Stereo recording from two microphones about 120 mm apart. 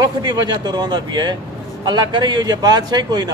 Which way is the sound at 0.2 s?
35° right (ahead or behind).